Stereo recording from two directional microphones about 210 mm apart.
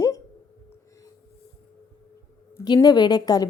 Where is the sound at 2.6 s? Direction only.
20° left (ahead or behind).